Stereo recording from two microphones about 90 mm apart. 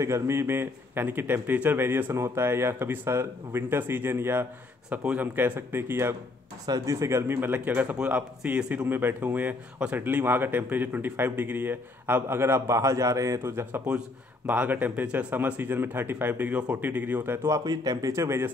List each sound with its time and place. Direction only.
0.0 s speech: 30° right (ahead or behind)
4.8 s speech: 15° right (ahead or behind)
6.6 s speech: 40° right (ahead or behind); by 13.8 s 25° right (ahead or behind)
13.8 s speech: 15° right (ahead or behind)
17.5 s a man's voice: 40° right (ahead or behind)